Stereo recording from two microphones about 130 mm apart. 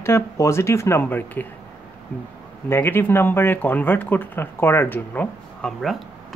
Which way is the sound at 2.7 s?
15° left (ahead or behind).